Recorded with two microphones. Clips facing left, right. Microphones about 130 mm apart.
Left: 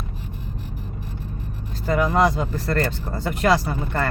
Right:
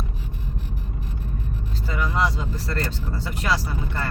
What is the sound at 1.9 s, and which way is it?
Speech, 50° left (ahead or behind).